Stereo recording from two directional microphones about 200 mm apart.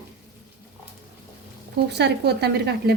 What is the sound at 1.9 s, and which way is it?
A woman's voice, 55° right (ahead or behind).